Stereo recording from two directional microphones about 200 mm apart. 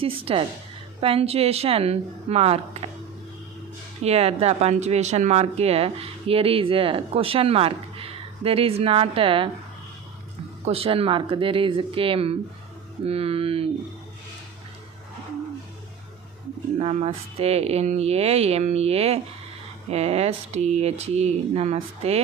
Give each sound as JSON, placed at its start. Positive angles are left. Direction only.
{"t": 0.0, "sound": "speech", "side_deg": -30}
{"t": 4.0, "sound": "speech", "side_deg": -30}
{"t": 10.7, "sound": "speech", "side_deg": -30}
{"t": 16.7, "sound": "speech", "side_deg": -30}